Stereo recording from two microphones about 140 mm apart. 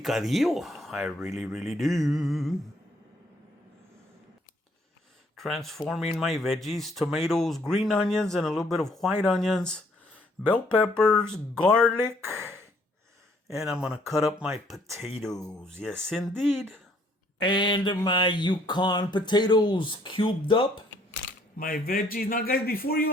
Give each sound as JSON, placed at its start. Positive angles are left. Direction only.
{"t": 0.0, "sound": "speech", "side_deg": 0}
{"t": 5.4, "sound": "speech", "side_deg": 0}
{"t": 11.9, "sound": "speech", "side_deg": -15}
{"t": 13.6, "sound": "speech", "side_deg": -5}
{"t": 17.4, "sound": "a sound", "side_deg": 35}
{"t": 21.6, "sound": "a man's voice", "side_deg": 90}